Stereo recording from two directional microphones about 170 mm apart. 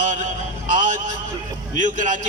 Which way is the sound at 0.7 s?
50° right (ahead or behind).